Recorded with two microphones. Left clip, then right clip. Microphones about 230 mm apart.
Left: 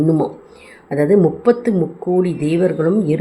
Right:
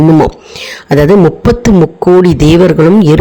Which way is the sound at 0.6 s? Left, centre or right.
Right.